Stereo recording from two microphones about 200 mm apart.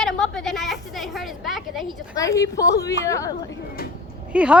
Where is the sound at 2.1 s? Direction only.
15° left (ahead or behind).